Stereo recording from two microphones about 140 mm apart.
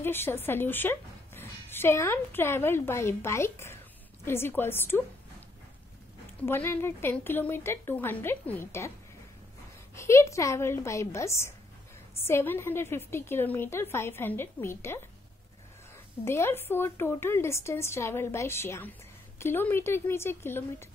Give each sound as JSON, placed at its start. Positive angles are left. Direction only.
{"t": 0.0, "sound": "a woman's voice", "side_deg": 15}
{"t": 6.4, "sound": "a woman's voice", "side_deg": 15}
{"t": 9.9, "sound": "a woman's voice", "side_deg": 20}
{"t": 16.3, "sound": "a woman's voice", "side_deg": 15}